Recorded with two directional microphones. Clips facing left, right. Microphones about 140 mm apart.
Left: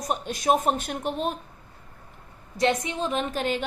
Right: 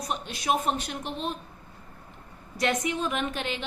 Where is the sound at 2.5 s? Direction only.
30° left (ahead or behind).